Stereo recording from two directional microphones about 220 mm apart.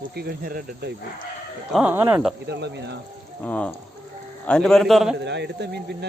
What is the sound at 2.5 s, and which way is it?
Speech, 50° right (ahead or behind).